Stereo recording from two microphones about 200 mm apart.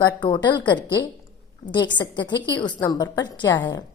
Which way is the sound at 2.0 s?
20° left (ahead or behind).